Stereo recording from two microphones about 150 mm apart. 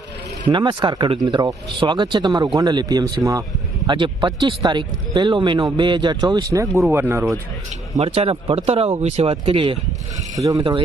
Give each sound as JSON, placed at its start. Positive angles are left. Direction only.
{"t": 0.5, "sound": "speech", "side_deg": -30}
{"t": 7.9, "sound": "speech", "side_deg": -40}
{"t": 10.3, "sound": "speech", "side_deg": -25}